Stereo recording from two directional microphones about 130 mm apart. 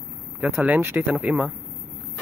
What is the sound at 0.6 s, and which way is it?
Speech, 15° right (ahead or behind).